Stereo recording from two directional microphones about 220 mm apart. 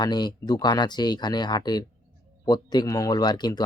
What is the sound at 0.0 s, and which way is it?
Speech, 20° left (ahead or behind).